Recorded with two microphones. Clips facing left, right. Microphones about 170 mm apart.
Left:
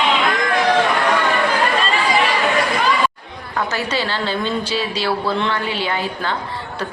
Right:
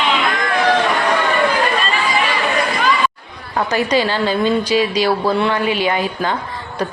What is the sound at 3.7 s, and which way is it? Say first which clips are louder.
A woman's voice: right 8 dB; 15° right (ahead or behind).